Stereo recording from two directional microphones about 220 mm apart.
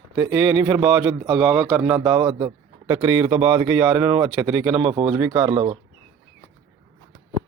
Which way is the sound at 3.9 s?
10° right (ahead or behind).